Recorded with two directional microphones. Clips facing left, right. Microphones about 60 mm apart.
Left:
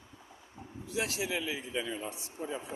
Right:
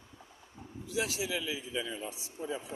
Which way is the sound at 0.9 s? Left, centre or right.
Left.